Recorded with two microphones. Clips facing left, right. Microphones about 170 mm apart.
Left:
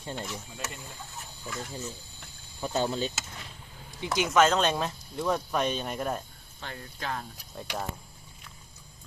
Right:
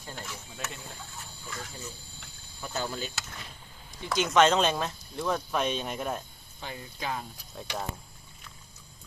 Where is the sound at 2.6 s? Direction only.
25° left (ahead or behind).